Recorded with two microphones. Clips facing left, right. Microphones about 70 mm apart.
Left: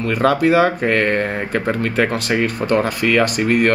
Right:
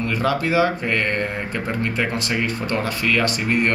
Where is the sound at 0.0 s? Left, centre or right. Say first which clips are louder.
Left 6 dB; left.